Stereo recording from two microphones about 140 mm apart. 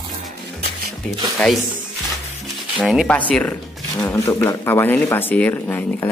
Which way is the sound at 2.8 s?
Centre (ahead or behind).